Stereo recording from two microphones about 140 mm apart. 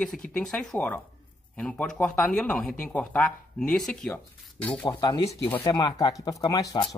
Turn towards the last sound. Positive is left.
turn(degrees=25)  # may be behind; listen again after turning